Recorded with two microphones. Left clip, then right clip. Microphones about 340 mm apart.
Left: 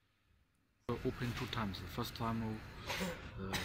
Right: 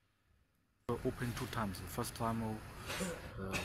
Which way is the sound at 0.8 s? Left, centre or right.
Centre.